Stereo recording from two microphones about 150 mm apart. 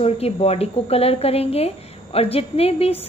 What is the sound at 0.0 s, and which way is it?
A woman's voice, 40° left (ahead or behind).